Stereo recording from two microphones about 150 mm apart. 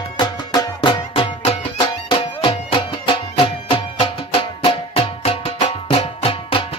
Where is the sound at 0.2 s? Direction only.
30° left (ahead or behind).